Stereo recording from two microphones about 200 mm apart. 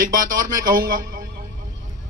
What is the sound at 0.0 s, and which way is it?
A man's voice, 45° right (ahead or behind).